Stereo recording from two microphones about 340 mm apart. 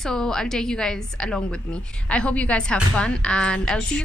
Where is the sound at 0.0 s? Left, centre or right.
Centre.